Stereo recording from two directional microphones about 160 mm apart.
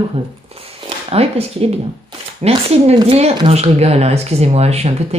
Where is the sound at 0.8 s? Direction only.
40° right (ahead or behind).